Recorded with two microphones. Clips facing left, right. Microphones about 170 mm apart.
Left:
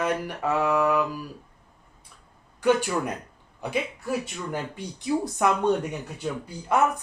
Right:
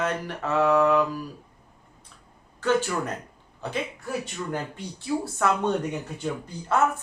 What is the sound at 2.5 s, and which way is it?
Speech, 15° left (ahead or behind).